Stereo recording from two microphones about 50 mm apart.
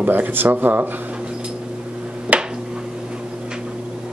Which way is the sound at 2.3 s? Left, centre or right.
Right.